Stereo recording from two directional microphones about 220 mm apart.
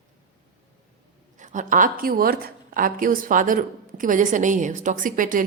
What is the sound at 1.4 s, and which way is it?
Speech, 35° right (ahead or behind).